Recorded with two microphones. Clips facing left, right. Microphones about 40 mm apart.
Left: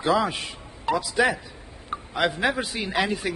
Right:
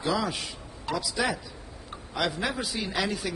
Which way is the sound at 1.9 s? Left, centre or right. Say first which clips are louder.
Left 5 dB; left.